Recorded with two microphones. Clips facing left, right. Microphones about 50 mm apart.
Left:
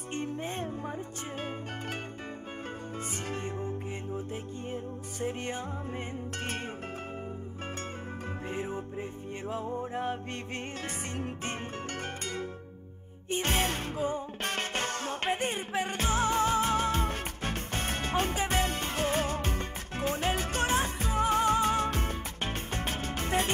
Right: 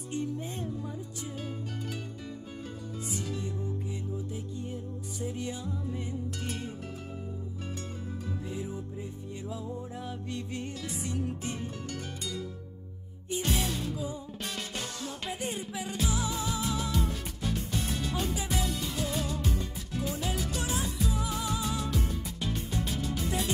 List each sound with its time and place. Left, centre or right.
0.1 s music: left
3.1 s music: left
8.5 s music: left